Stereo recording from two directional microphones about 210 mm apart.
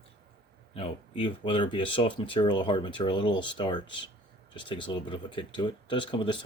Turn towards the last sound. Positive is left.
turn(degrees=20)  # may be behind; listen again after turning